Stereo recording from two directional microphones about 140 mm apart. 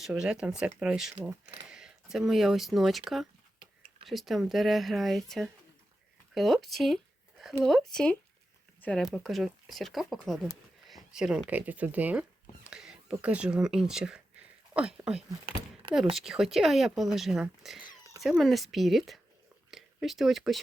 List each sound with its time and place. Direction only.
0.0 s speech: 5° right (ahead or behind)
1.3 s speech: 25° right (ahead or behind)
1.6 s speech: 5° right (ahead or behind)
3.6 s a sound: 40° right (ahead or behind)
4.0 s speech: centre (ahead or behind)
12.6 s a sound: 5° right (ahead or behind)
13.2 s speech: 10° right (ahead or behind)
15.4 s a sound: 40° right (ahead or behind)
16.1 s speech: centre (ahead or behind)